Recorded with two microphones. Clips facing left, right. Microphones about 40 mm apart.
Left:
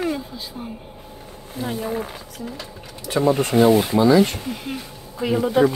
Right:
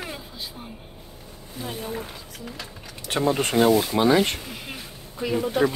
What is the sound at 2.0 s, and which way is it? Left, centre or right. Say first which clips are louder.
Speech: left 6 dB; left.